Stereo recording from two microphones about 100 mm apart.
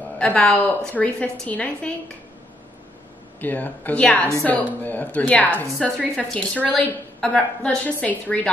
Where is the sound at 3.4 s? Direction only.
15° left (ahead or behind).